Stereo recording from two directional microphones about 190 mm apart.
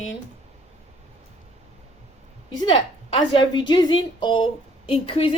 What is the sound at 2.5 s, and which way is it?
A woman's voice, 25° left (ahead or behind).